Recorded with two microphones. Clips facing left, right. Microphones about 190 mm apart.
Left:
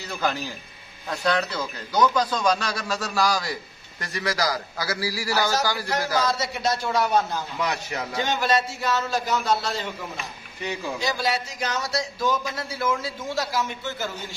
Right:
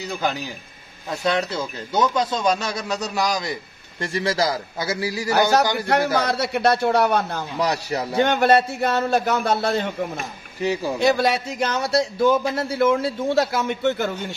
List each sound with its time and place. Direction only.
0.1 s a man's voice: 15° right (ahead or behind)
6.1 s a man's voice: 60° right (ahead or behind)
7.5 s a man's voice: 35° right (ahead or behind)
8.2 s a man's voice: 60° right (ahead or behind)
10.6 s a man's voice: 40° right (ahead or behind)
11.0 s a man's voice: 60° right (ahead or behind)